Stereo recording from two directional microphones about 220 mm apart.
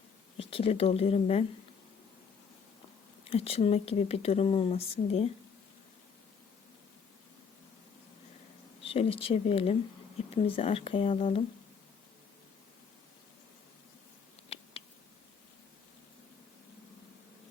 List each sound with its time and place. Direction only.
0.3 s speech: 25° left (ahead or behind)
3.2 s speech: 25° left (ahead or behind)
8.8 s speech: 25° left (ahead or behind)
14.5 s a sound: 25° left (ahead or behind)